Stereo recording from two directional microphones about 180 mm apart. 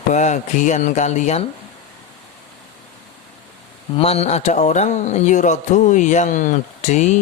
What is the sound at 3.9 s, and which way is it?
Speech, 35° left (ahead or behind).